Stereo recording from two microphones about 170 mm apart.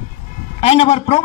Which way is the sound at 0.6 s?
35° left (ahead or behind).